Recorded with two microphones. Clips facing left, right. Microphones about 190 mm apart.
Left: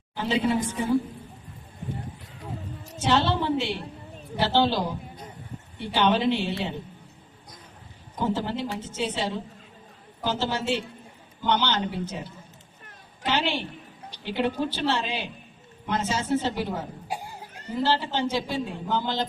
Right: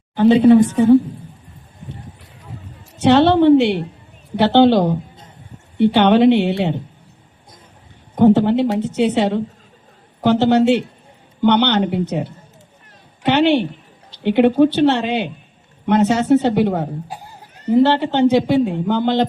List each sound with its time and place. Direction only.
0.2 s a man's voice: 60° right (ahead or behind)
3.0 s a man's voice: 65° right (ahead or behind)
8.1 s a man's voice: 60° right (ahead or behind)